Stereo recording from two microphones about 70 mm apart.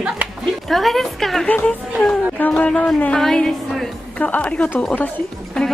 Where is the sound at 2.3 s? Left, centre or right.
Left.